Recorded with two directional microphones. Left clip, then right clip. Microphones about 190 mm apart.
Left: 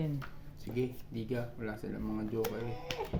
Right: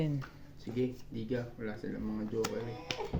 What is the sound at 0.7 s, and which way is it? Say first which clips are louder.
Speech: right 1 dB; 60° left (ahead or behind).